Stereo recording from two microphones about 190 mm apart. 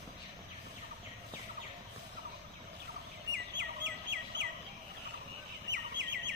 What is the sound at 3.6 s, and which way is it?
Chirp, 70° right (ahead or behind).